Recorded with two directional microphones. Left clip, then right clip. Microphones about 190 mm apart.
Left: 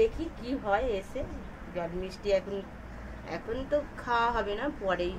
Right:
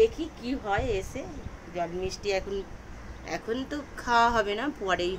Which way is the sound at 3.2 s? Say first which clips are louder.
Right 4 dB; 45° right (ahead or behind).